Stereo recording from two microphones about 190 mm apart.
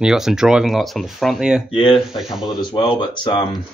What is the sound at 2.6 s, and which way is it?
Speech, 25° left (ahead or behind).